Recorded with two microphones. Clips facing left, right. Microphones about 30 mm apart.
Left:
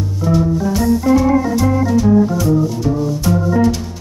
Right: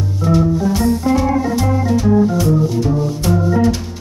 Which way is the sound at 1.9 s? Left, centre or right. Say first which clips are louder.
Right 1 dB; centre.